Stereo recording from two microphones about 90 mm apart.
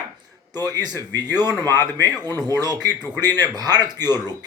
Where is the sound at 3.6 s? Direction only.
50° right (ahead or behind).